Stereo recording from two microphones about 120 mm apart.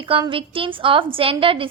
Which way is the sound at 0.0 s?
45° right (ahead or behind).